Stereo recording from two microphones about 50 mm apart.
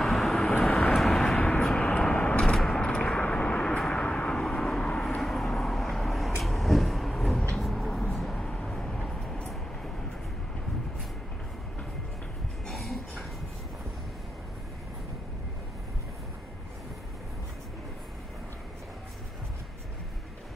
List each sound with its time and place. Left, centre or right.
0.0 s vehicle: centre
1.4 s vehicle: centre
4.4 s vehicle: centre
5.0 s vehicle: centre
6.4 s a sound: centre
7.5 s vehicle: centre
12.6 s a sound: centre